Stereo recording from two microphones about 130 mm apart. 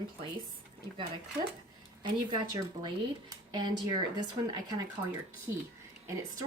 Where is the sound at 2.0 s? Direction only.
35° right (ahead or behind).